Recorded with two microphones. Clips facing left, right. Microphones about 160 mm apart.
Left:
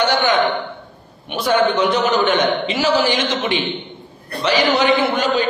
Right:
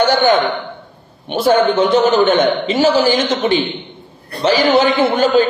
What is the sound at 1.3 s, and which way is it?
A man's voice, 30° right (ahead or behind).